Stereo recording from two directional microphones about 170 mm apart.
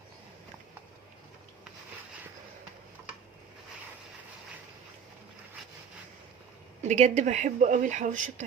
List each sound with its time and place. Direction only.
6.8 s speech: 40° right (ahead or behind)